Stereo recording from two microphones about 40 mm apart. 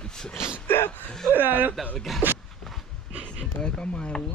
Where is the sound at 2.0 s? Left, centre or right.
Centre.